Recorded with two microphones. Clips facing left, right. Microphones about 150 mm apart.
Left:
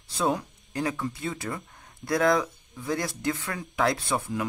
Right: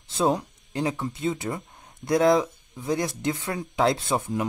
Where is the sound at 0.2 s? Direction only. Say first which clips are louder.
Right 3 dB; 25° right (ahead or behind).